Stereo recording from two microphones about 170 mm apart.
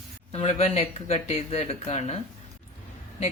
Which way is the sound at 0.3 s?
40° left (ahead or behind).